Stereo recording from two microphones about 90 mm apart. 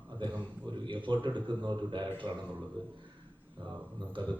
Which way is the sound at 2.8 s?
75° right (ahead or behind).